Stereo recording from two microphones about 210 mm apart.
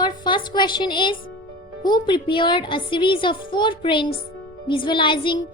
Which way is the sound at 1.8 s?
20° left (ahead or behind).